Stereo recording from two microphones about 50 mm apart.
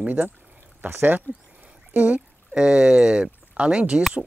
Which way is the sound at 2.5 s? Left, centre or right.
Centre.